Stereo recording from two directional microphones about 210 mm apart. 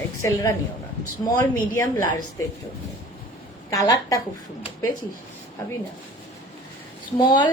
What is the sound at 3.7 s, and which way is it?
Speech, 15° left (ahead or behind).